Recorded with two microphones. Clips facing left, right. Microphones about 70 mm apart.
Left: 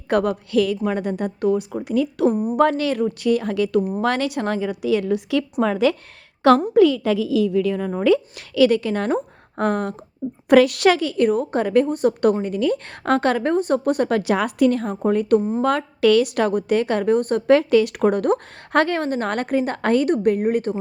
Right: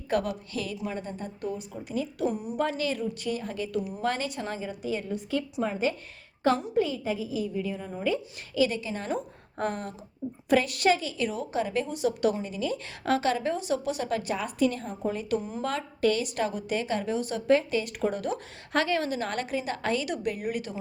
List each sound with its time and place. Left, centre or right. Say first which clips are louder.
0.1 s a woman's voice: left 9 dB; left
3.8 s a woman's voice: left 10 dB; left
4.0 s a woman's voice: left 9 dB; left
10.5 s a woman's voice: left 9 dB; left
15.4 s speech: left 13 dB; left
15.6 s a woman's voice: left 9 dB; left